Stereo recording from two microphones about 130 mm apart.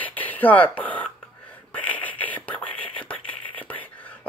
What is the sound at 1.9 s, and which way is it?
Whispering, 10° left (ahead or behind).